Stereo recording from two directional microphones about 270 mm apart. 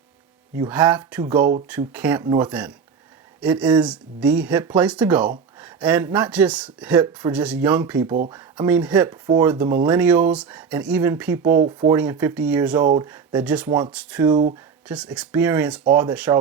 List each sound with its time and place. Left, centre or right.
0.5 s speech: centre
1.3 s speech: centre
1.9 s speech: centre
9.2 s speech: centre
13.7 s speech: centre
13.9 s speech: centre
14.3 s speech: centre
14.8 s speech: centre